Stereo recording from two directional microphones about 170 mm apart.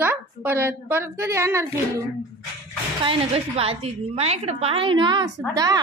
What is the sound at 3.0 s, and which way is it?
A woman's voice, 35° right (ahead or behind).